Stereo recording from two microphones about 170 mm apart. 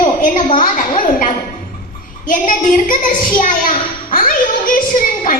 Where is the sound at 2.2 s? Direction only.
55° left (ahead or behind).